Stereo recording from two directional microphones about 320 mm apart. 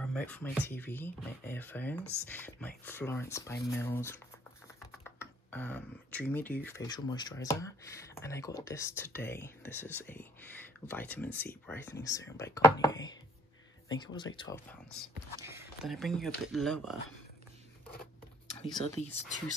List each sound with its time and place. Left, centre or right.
0.0 s speech: centre
15.4 s speech: centre
18.8 s speech: centre